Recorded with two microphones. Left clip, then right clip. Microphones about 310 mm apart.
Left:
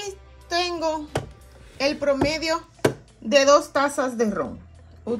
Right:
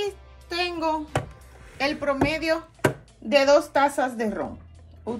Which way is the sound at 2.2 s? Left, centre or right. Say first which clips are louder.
Even; left.